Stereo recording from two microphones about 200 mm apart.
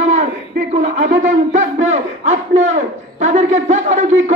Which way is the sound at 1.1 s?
35° right (ahead or behind).